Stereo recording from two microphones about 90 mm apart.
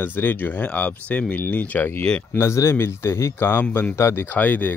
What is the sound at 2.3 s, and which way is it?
Speech, 30° left (ahead or behind).